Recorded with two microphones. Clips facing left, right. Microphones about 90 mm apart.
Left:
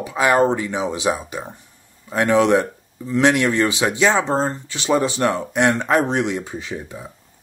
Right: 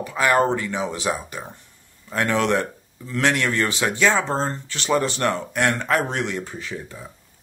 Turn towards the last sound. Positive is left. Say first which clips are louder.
# left 3 dB
turn(degrees=15)  # may be behind; listen again after turning